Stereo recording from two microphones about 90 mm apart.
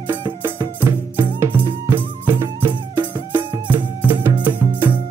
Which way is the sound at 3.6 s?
20° right (ahead or behind).